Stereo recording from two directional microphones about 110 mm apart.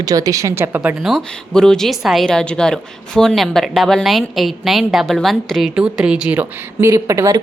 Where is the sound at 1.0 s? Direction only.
Centre (ahead or behind).